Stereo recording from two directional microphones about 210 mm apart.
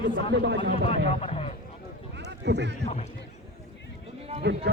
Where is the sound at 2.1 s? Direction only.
55° right (ahead or behind).